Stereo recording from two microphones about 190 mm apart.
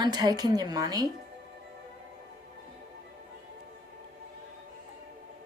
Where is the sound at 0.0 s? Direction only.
20° right (ahead or behind).